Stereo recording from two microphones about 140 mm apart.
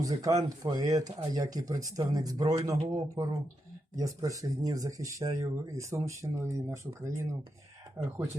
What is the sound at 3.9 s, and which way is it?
Speech, 25° right (ahead or behind).